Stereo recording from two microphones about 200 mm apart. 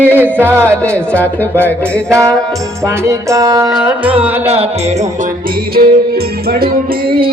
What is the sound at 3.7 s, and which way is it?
Music, 5° right (ahead or behind).